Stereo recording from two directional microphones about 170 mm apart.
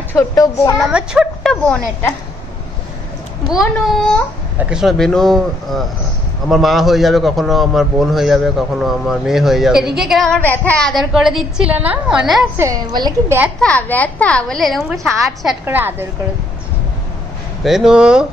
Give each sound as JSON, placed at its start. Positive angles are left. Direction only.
{"t": 0.1, "sound": "a child's voice", "side_deg": 20}
{"t": 0.7, "sound": "a man's voice", "side_deg": -5}
{"t": 3.4, "sound": "a man's voice", "side_deg": 0}
{"t": 12.5, "sound": "a woman's voice", "side_deg": -20}
{"t": 13.6, "sound": "speech", "side_deg": 5}
{"t": 15.6, "sound": "a woman's voice", "side_deg": -10}
{"t": 17.6, "sound": "a man's voice", "side_deg": -5}